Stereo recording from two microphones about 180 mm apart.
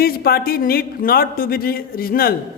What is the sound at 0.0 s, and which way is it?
Speech, 55° left (ahead or behind).